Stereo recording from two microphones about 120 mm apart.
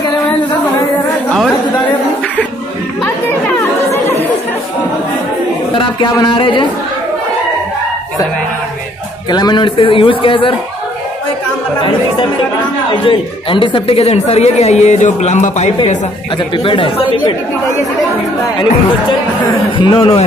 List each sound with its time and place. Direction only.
5.8 s speech: 40° left (ahead or behind)
9.3 s a man's voice: 35° left (ahead or behind)
13.0 s a man's voice: 45° left (ahead or behind); by 15.7 s 80° left
16.5 s a man's voice: 45° left (ahead or behind)
19.8 s speech: 40° left (ahead or behind)